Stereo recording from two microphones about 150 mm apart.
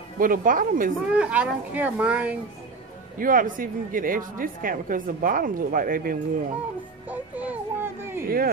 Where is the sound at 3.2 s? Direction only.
65° right (ahead or behind).